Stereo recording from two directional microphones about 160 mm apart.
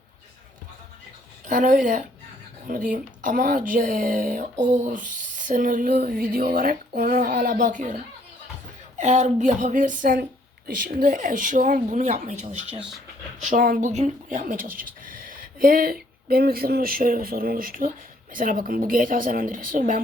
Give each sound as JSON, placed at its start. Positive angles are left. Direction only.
{"t": 1.5, "sound": "speech", "side_deg": -55}
{"t": 9.0, "sound": "speech", "side_deg": -45}